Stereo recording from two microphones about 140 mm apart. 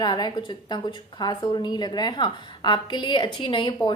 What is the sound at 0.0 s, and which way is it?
A woman's voice, 30° left (ahead or behind).